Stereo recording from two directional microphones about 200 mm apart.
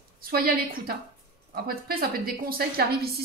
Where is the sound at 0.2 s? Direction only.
50° right (ahead or behind).